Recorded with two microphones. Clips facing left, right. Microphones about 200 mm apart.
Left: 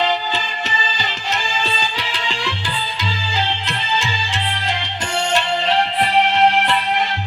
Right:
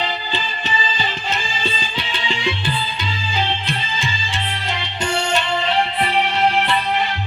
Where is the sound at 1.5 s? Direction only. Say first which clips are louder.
Left 2 dB; 80° left.